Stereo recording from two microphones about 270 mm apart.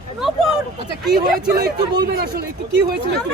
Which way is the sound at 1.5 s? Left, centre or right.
Centre.